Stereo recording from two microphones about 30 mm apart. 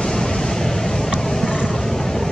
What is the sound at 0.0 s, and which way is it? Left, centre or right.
Vehicle, centre.